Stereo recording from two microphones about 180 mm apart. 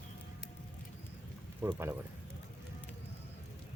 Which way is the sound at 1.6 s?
10° right (ahead or behind).